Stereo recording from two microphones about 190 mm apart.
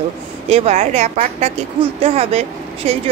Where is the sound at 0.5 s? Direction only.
35° right (ahead or behind).